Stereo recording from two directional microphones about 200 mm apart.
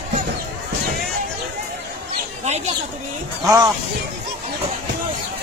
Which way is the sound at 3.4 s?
15° right (ahead or behind).